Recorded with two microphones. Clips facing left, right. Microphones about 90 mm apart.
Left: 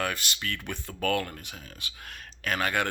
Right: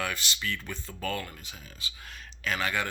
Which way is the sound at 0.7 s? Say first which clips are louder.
Left 5 dB; 65° left (ahead or behind).